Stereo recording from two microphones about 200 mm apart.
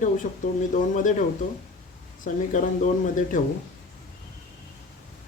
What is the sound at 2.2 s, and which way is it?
Speech, 40° left (ahead or behind).